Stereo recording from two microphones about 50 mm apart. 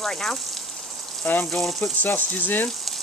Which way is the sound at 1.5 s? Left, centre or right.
Centre.